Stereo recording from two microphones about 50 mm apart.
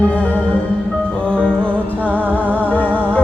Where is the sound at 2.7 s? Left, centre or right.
Left.